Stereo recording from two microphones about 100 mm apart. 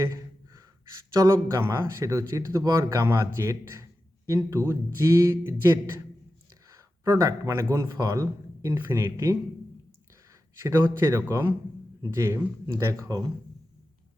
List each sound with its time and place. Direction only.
0.0 s gasp: 35° right (ahead or behind)
1.2 s speech: 35° right (ahead or behind)
11.0 s a man's voice: 25° right (ahead or behind)